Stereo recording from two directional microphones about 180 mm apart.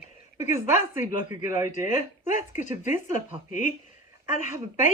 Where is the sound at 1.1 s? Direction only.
45° left (ahead or behind).